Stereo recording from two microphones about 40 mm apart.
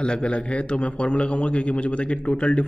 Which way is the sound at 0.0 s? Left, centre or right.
Left.